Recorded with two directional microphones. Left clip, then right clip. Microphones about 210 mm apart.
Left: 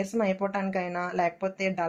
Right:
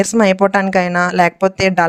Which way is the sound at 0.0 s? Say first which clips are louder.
Right 15 dB; 40° right (ahead or behind).